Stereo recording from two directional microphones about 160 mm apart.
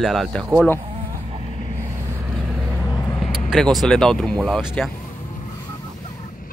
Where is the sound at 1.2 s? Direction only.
35° right (ahead or behind).